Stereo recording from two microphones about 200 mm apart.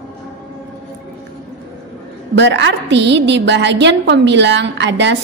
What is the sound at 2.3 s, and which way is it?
A woman's voice, 65° right (ahead or behind).